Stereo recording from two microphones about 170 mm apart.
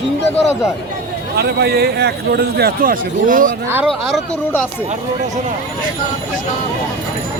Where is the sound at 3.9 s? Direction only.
Centre (ahead or behind).